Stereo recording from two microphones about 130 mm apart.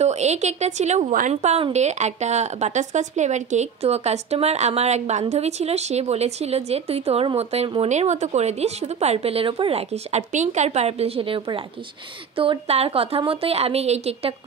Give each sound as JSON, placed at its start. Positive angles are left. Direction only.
{"t": 0.0, "sound": "speech", "side_deg": -60}